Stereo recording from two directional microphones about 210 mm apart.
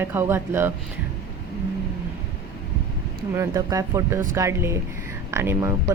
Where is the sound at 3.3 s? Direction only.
15° right (ahead or behind).